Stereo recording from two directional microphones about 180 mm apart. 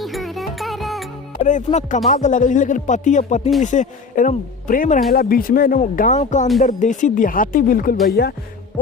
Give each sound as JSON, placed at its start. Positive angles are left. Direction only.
{"t": 0.0, "sound": "music", "side_deg": 0}
{"t": 1.5, "sound": "speech", "side_deg": 45}